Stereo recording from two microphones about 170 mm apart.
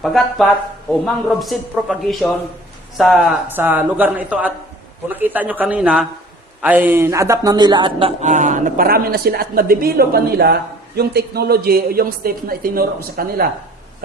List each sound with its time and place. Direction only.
0.0 s a man's voice: centre (ahead or behind)
3.5 s a man's voice: 10° right (ahead or behind); by 8.1 s 30° right (ahead or behind)
8.2 s a woman's voice: 45° right (ahead or behind); by 13.5 s 60° right (ahead or behind)